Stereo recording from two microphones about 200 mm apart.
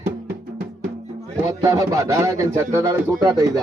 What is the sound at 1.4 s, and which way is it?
A man's voice, 20° right (ahead or behind).